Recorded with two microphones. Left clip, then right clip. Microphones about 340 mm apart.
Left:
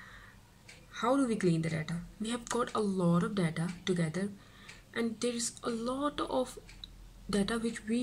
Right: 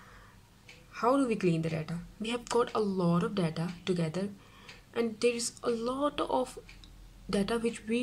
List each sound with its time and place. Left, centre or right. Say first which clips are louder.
0.9 s speech: right 3 dB; centre